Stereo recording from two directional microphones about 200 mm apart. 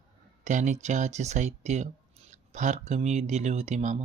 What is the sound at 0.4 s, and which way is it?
Speech, 35° right (ahead or behind).